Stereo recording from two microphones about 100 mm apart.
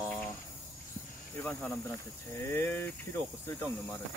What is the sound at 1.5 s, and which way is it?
Speech, 10° left (ahead or behind).